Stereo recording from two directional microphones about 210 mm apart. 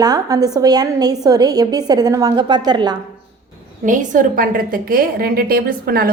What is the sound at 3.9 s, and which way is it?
A woman's voice, 40° right (ahead or behind).